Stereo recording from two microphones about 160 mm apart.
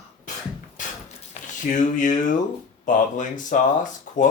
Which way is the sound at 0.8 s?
55° left (ahead or behind).